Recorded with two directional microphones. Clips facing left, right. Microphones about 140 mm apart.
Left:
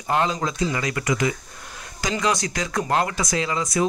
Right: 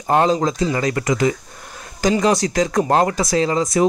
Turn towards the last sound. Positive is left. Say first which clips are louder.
# right 6 dB
turn(degrees=-35)  # may be behind; listen again after turning